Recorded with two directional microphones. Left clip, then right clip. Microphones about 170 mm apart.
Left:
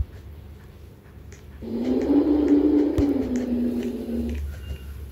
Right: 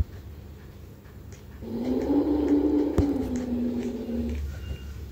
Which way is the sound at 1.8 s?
55° left (ahead or behind).